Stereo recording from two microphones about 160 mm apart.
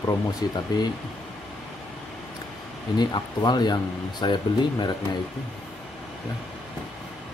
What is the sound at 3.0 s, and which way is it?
Speech, 25° left (ahead or behind).